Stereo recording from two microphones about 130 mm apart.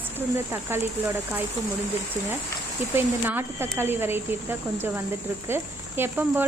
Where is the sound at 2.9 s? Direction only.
15° right (ahead or behind).